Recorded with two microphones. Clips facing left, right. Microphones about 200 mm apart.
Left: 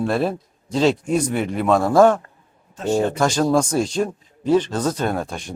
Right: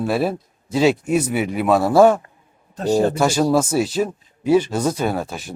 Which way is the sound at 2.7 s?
35° right (ahead or behind).